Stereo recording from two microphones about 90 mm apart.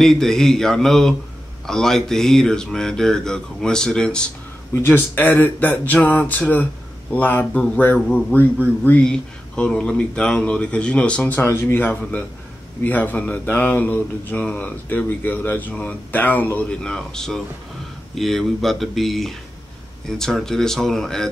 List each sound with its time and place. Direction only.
0.0 s speech: 5° left (ahead or behind)
4.8 s speech: 20° left (ahead or behind); by 21.3 s 5° left (ahead or behind)